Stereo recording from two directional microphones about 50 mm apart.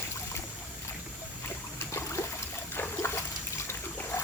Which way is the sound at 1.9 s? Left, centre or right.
Left.